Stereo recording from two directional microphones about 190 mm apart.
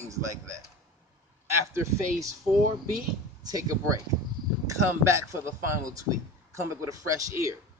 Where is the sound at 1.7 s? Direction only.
15° right (ahead or behind).